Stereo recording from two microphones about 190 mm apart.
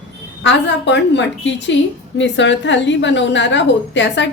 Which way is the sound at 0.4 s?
70° left (ahead or behind).